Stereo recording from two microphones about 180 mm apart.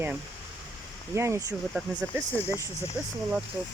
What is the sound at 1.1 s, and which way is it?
Speech, 15° right (ahead or behind).